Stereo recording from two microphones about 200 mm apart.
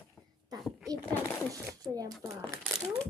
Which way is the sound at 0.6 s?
Centre (ahead or behind).